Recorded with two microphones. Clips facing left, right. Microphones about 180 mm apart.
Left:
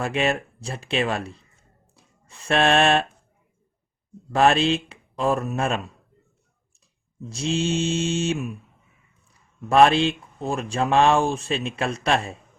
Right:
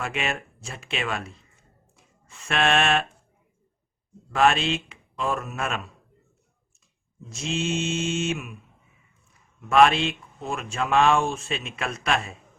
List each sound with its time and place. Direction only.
0.0 s speech: 35° left (ahead or behind)
4.3 s speech: 35° left (ahead or behind)
7.3 s speech: 35° left (ahead or behind)
9.6 s speech: 35° left (ahead or behind)